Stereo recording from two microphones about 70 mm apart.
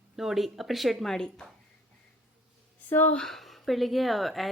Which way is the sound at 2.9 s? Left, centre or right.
Left.